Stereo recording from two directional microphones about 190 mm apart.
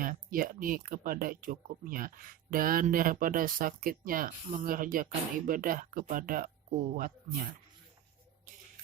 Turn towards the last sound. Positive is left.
turn(degrees=-50)  # may be behind; listen again after turning